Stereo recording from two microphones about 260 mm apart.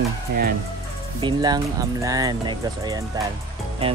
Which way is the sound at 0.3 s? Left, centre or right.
Right.